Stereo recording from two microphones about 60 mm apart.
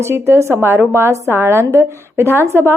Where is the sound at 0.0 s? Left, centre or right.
Right.